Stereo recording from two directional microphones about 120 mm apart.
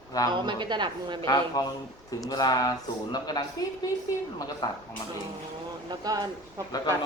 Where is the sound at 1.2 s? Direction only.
30° left (ahead or behind).